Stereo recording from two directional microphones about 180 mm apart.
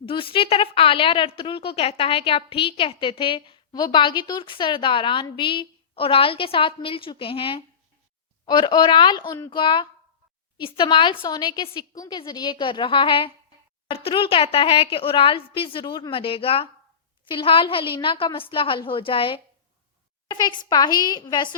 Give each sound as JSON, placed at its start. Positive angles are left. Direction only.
{"t": 0.0, "sound": "a woman's voice", "side_deg": 30}